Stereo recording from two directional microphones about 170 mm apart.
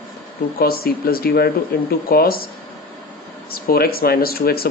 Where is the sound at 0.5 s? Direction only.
60° left (ahead or behind).